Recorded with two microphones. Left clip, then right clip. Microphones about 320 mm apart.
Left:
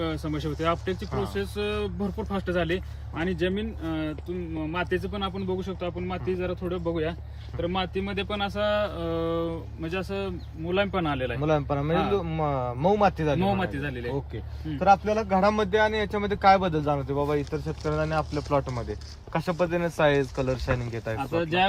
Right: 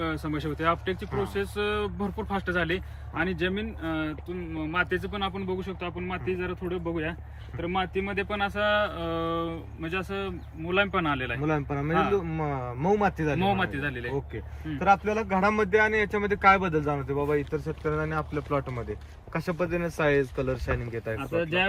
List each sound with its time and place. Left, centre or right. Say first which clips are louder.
0.3 s speech: right 1 dB; centre
11.5 s speech: left 2 dB; centre
13.4 s speech: right 1 dB; centre; by 21.2 s left
21.2 s speech: left 2 dB; centre